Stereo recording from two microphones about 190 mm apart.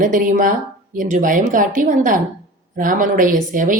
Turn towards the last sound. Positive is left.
turn(degrees=-45)  # may be behind; listen again after turning